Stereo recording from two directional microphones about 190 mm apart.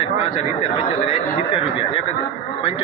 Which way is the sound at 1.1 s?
30° left (ahead or behind).